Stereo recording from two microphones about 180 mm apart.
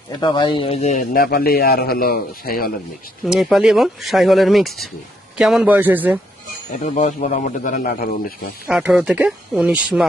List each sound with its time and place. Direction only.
0.2 s speech: 25° left (ahead or behind)
1.1 s a man's voice: 55° left (ahead or behind)
3.2 s a man's voice: centre (ahead or behind)
6.7 s a man's voice: 45° left (ahead or behind)
8.6 s speech: 5° right (ahead or behind)